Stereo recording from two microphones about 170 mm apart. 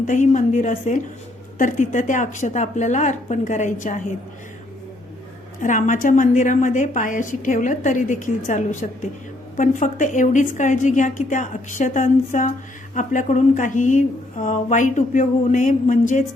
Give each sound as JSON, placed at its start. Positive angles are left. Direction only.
{"t": 0.1, "sound": "a woman's voice", "side_deg": 45}
{"t": 5.6, "sound": "a woman's voice", "side_deg": 50}